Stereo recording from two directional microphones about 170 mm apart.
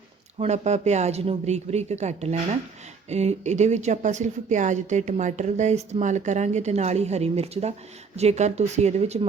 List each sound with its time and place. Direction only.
0.3 s speech: 40° right (ahead or behind)